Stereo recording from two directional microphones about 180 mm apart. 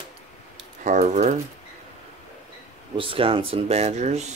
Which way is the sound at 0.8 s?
45° right (ahead or behind).